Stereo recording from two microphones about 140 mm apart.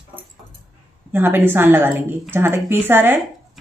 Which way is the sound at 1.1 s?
15° right (ahead or behind).